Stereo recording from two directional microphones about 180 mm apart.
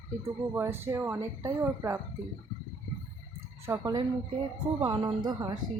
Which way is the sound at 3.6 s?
20° right (ahead or behind).